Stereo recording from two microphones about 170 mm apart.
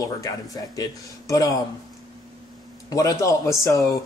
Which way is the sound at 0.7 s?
20° left (ahead or behind).